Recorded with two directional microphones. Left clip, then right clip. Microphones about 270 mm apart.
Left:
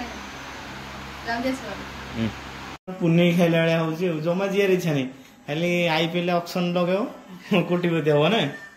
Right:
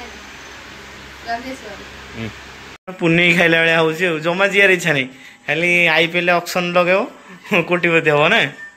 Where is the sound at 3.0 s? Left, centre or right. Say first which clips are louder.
Right 8 dB; right.